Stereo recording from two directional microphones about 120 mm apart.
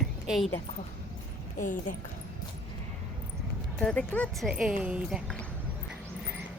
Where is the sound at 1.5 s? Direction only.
90° left.